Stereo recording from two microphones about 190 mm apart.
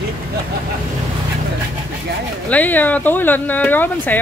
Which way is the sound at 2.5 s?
10° left (ahead or behind).